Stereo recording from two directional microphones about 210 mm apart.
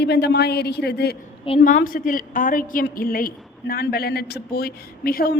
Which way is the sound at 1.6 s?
40° left (ahead or behind).